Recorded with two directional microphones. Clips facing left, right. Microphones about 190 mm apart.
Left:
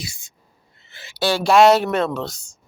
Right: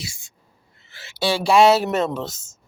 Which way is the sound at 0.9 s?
20° left (ahead or behind).